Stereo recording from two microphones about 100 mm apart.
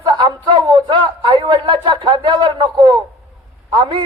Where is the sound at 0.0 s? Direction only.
50° right (ahead or behind).